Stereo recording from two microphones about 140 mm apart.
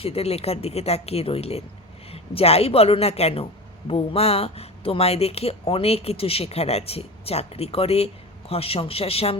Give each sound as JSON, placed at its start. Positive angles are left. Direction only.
{"t": 0.0, "sound": "speech", "side_deg": 45}